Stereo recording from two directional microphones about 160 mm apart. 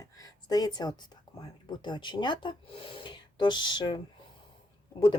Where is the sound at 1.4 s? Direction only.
25° left (ahead or behind).